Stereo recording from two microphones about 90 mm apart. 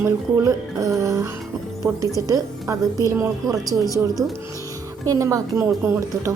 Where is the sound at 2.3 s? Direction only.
35° right (ahead or behind).